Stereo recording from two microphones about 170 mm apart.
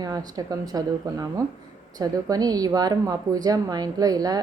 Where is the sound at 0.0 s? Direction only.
20° right (ahead or behind).